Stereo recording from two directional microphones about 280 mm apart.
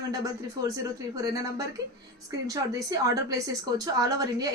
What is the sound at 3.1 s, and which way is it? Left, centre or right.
A woman's voice, centre.